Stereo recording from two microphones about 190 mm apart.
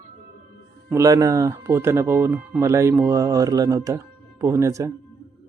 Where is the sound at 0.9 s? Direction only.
15° right (ahead or behind).